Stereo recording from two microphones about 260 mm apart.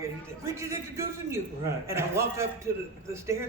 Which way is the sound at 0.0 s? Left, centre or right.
Centre.